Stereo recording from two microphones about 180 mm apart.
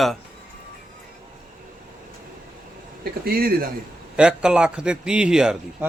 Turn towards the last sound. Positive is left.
turn(degrees=-5)  # may be behind; listen again after turning